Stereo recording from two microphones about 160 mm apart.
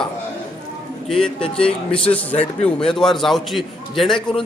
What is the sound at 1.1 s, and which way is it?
Speech, 5° left (ahead or behind).